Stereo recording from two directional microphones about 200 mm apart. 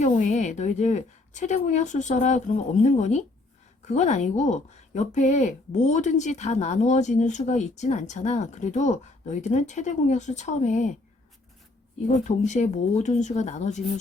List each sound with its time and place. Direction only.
0.0 s speech: 35° left (ahead or behind)
12.1 s speech: 35° left (ahead or behind)